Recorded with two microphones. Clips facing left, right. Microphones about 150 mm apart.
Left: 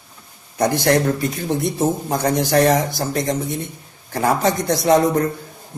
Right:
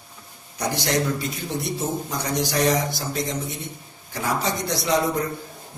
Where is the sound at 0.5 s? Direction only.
55° left (ahead or behind).